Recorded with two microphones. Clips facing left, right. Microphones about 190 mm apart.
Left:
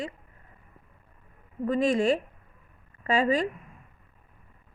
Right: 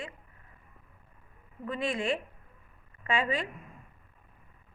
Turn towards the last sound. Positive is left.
turn(degrees=40)  # may be behind; listen again after turning